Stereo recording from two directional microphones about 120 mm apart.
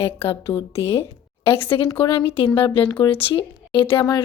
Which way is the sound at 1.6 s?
50° left (ahead or behind).